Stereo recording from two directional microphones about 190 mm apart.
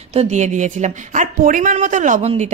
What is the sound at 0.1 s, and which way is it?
Speech, 35° right (ahead or behind).